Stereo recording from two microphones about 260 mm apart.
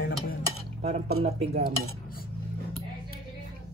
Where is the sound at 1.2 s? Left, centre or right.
Right.